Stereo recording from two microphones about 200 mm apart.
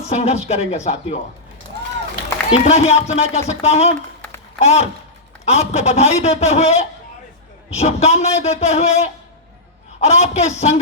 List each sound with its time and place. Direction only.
0.1 s a man's voice: 30° left (ahead or behind)
2.5 s a man's voice: 30° left (ahead or behind)